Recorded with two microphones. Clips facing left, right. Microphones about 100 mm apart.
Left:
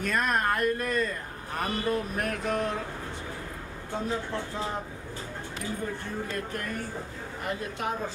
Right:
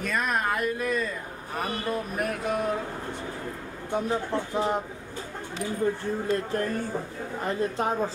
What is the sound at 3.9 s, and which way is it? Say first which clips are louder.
Speech: right 4 dB; 20° right (ahead or behind).